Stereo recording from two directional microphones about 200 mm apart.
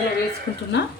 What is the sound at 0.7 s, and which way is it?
Speech, 60° left (ahead or behind).